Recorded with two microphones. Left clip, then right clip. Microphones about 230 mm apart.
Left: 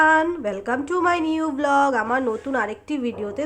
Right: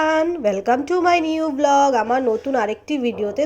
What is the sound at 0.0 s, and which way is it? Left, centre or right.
Speech, centre.